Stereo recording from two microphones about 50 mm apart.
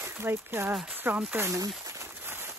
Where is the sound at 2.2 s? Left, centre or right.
Right.